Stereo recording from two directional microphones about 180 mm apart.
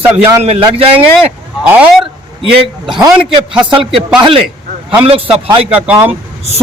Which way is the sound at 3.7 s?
25° right (ahead or behind).